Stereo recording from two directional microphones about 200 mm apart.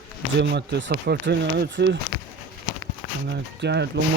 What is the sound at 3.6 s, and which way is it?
Speech, 60° right (ahead or behind).